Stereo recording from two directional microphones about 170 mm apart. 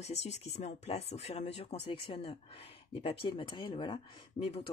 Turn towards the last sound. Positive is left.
turn(degrees=30)  # may be behind; listen again after turning